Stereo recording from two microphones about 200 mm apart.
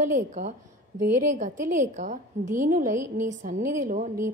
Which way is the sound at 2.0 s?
40° right (ahead or behind).